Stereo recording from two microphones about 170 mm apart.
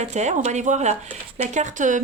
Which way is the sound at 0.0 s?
40° right (ahead or behind).